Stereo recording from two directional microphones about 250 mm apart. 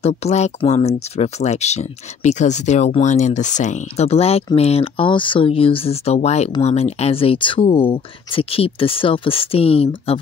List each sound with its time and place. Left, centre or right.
0.0 s speech: left